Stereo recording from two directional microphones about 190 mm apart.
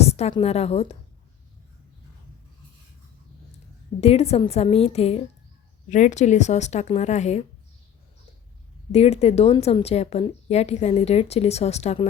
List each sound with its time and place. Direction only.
0.0 s a woman's voice: 35° left (ahead or behind)
4.0 s a woman's voice: 35° left (ahead or behind)
8.9 s a woman's voice: 35° left (ahead or behind)